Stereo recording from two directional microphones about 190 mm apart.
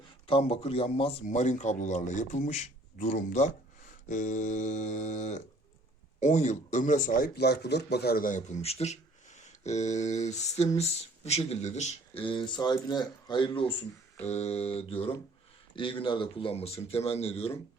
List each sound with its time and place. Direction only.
0.3 s speech: 30° left (ahead or behind)